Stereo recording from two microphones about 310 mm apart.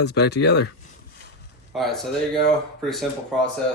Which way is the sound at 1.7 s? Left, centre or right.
Centre.